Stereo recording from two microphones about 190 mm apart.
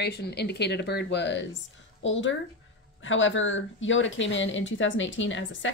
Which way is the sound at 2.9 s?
90° left.